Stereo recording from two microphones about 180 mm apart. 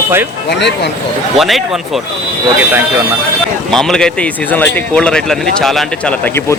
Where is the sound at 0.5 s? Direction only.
75° left (ahead or behind).